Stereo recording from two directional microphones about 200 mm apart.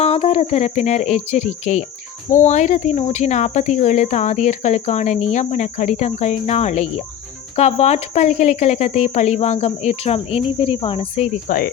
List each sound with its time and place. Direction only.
0.0 s speech: 30° left (ahead or behind)
11.4 s speech: 45° left (ahead or behind)